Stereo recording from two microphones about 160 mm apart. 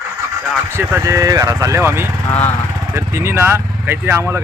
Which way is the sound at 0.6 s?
15° right (ahead or behind).